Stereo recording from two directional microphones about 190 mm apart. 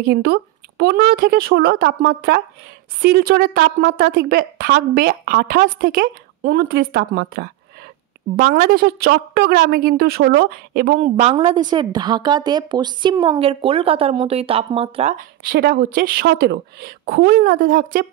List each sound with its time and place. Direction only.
0.0 s a woman's voice: 55° right (ahead or behind)
11.0 s a woman's voice: 35° right (ahead or behind)
15.1 s a woman's voice: 50° right (ahead or behind)